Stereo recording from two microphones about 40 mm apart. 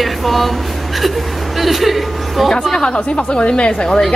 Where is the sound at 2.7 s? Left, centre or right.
Left.